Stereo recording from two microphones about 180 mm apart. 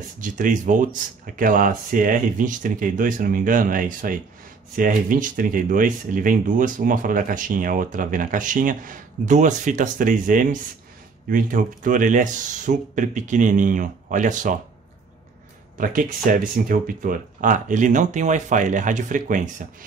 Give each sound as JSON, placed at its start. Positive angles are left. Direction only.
{"t": 0.2, "sound": "speech", "side_deg": -45}
{"t": 15.8, "sound": "speech", "side_deg": -50}